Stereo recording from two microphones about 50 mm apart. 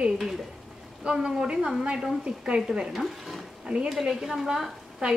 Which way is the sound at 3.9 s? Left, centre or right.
Centre.